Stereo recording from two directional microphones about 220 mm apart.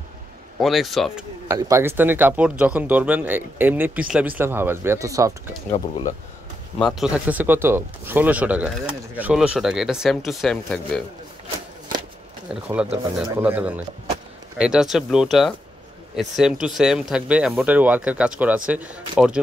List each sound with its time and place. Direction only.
0.6 s speech: centre (ahead or behind)
1.5 s speech: 15° right (ahead or behind)
5.7 s speech: 30° left (ahead or behind)
6.8 s speech: centre (ahead or behind)
12.9 s speech: 5° right (ahead or behind)